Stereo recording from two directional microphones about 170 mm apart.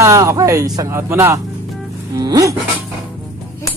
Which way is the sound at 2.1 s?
20° right (ahead or behind).